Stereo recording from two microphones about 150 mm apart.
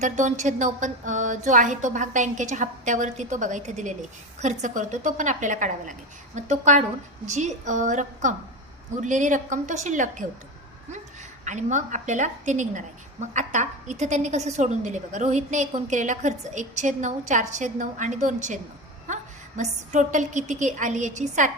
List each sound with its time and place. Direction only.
0.0 s a woman's voice: 55° right (ahead or behind)
11.4 s a woman's voice: 55° right (ahead or behind)